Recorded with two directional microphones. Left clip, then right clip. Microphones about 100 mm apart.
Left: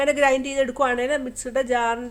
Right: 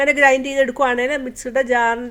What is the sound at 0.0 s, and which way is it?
A woman's voice, 45° right (ahead or behind).